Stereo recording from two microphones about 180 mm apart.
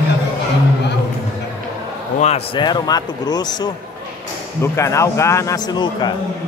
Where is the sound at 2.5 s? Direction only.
25° left (ahead or behind).